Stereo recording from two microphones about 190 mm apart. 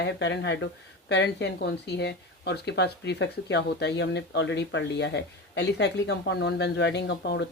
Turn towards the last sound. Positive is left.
turn(degrees=65)  # may be behind; listen again after turning